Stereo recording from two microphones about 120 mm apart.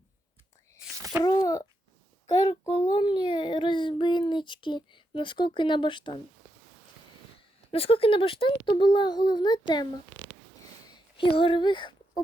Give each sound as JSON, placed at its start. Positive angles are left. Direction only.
{"t": 1.1, "sound": "a child's voice", "side_deg": -20}
{"t": 2.2, "sound": "a sound", "side_deg": 35}
{"t": 2.6, "sound": "a child's voice", "side_deg": 45}
{"t": 7.7, "sound": "a child's voice", "side_deg": 50}
{"t": 10.9, "sound": "speech", "side_deg": 45}